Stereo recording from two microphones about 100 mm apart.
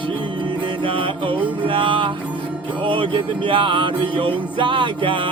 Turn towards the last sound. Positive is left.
turn(degrees=-60)  # may be behind; listen again after turning